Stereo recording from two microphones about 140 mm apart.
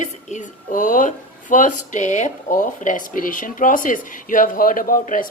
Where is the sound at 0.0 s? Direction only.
60° left (ahead or behind).